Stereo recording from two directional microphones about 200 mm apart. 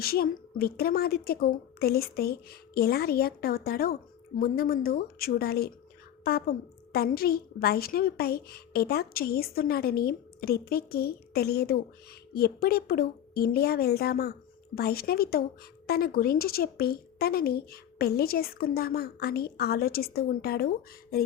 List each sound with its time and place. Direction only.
0.0 s a woman's voice: 50° left (ahead or behind)